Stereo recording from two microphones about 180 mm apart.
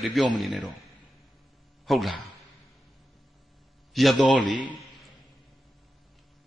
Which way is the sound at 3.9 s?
Centre (ahead or behind).